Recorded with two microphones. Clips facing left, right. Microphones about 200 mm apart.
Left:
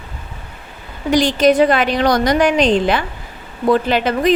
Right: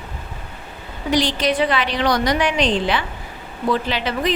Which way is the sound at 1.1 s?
45° left (ahead or behind).